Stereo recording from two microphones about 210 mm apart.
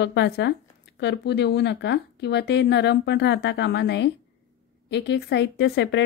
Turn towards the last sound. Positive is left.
turn(degrees=55)  # may be behind; listen again after turning